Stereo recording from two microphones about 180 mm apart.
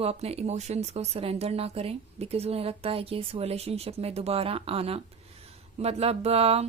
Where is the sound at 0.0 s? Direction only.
35° right (ahead or behind).